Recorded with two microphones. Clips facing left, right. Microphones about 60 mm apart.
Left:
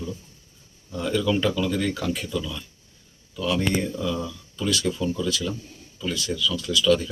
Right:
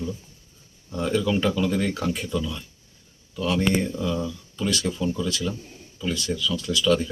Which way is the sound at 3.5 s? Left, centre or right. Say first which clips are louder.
Right 2 dB; centre.